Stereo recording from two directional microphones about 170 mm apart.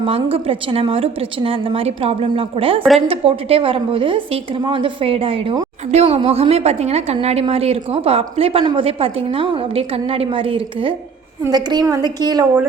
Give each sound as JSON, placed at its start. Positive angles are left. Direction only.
{"t": 0.0, "sound": "a woman's voice", "side_deg": -35}